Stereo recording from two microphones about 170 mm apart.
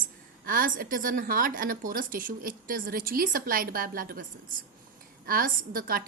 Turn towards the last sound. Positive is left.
turn(degrees=-60)  # may be behind; listen again after turning